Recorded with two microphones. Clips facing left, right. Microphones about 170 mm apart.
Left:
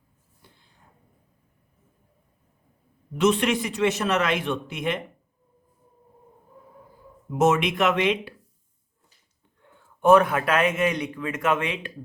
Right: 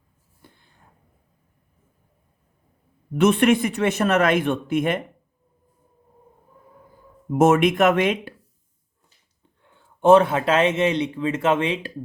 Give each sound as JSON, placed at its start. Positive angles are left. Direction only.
{"t": 0.4, "sound": "a sound", "side_deg": -55}
{"t": 3.2, "sound": "a man's voice", "side_deg": -55}
{"t": 7.3, "sound": "a man's voice", "side_deg": -50}
{"t": 10.0, "sound": "speech", "side_deg": -25}